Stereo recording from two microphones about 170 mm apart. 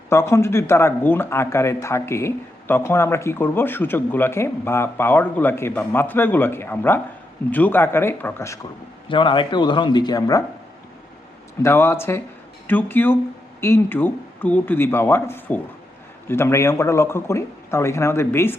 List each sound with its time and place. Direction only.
0.1 s speech: 15° left (ahead or behind)
9.0 s a man's voice: 30° left (ahead or behind)
11.6 s speech: 15° left (ahead or behind)